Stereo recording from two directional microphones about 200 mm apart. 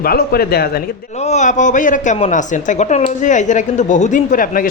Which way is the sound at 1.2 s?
35° left (ahead or behind).